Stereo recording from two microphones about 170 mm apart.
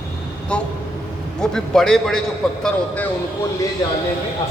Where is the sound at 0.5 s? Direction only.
5° left (ahead or behind).